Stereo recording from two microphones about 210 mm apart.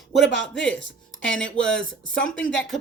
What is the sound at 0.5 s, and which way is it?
Speech, 55° left (ahead or behind).